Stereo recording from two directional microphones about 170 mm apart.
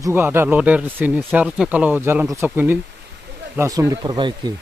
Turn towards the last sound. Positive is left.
turn(degrees=-25)  # may be behind; listen again after turning